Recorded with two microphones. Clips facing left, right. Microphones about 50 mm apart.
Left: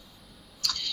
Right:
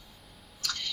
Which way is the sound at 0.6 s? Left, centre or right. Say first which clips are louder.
Left 2 dB; right.